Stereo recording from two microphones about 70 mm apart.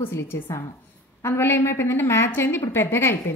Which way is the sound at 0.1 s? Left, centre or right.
Left.